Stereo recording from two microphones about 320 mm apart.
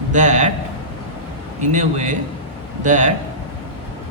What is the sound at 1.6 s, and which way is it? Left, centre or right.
A man's voice, right.